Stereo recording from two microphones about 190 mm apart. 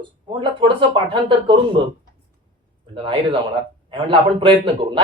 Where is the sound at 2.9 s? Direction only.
25° right (ahead or behind).